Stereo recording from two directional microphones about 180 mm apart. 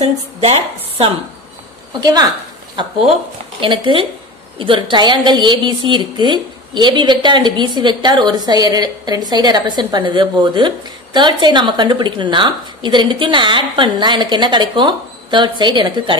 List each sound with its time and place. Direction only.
0.0 s a woman's voice: 35° right (ahead or behind)
2.0 s a woman's voice: 25° right (ahead or behind)